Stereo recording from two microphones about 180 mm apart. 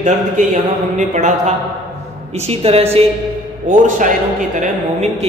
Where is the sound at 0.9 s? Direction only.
40° right (ahead or behind).